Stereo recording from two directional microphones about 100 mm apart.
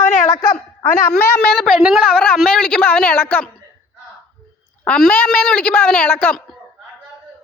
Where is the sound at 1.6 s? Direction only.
5° left (ahead or behind).